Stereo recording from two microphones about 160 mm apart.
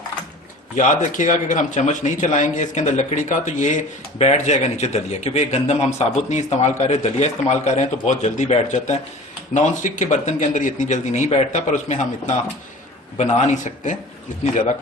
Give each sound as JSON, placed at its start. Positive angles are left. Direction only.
{"t": 0.8, "sound": "speech", "side_deg": 50}